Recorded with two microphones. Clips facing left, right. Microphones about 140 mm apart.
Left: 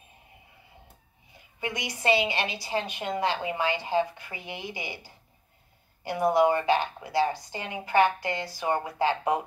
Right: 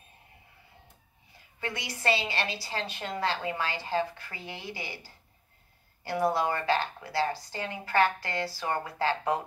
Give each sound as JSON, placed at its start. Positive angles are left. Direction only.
{"t": 1.6, "sound": "a woman's voice", "side_deg": 15}